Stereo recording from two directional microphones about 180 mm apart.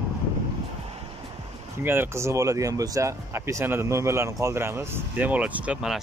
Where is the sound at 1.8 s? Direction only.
10° right (ahead or behind).